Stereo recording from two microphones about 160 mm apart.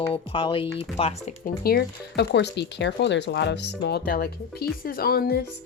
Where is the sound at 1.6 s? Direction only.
75° left (ahead or behind).